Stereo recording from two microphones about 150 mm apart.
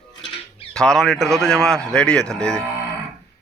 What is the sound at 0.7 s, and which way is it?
A man's voice, 5° left (ahead or behind).